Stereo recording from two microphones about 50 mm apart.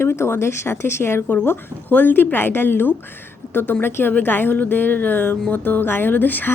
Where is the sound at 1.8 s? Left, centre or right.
Left.